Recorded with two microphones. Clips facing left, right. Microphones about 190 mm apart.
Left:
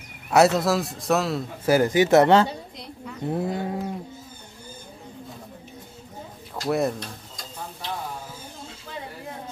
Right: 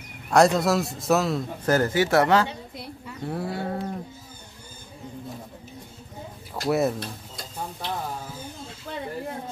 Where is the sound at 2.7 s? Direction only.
5° right (ahead or behind).